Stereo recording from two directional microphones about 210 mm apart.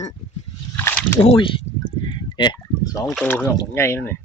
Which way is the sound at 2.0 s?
20° left (ahead or behind).